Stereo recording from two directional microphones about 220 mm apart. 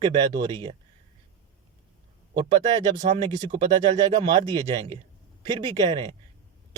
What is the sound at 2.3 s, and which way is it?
Speech, 25° right (ahead or behind).